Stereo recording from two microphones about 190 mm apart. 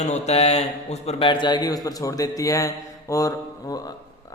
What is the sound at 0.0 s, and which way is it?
A man's voice, 35° left (ahead or behind).